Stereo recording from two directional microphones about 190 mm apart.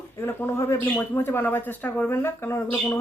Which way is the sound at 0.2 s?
10° left (ahead or behind).